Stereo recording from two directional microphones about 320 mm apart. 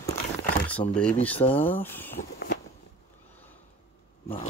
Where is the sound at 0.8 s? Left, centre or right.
Centre.